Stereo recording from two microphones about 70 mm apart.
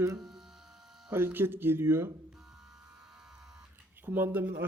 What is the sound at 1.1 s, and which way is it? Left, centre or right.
A man's voice, right.